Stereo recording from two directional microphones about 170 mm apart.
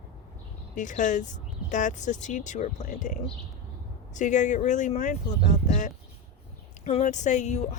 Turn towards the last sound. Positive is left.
turn(degrees=45)  # may be behind; listen again after turning